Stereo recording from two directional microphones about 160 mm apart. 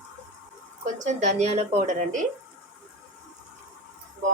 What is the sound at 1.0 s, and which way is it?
A woman's voice, 45° right (ahead or behind).